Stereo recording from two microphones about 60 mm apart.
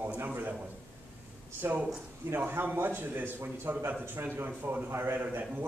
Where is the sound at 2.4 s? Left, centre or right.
Right.